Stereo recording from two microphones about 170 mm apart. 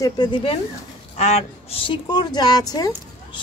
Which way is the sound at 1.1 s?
40° left (ahead or behind).